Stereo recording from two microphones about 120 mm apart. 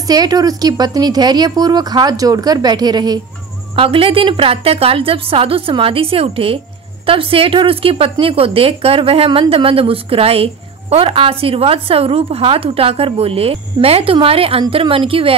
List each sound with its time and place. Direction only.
0.0 s speech: 35° right (ahead or behind)
3.7 s speech: 50° right (ahead or behind)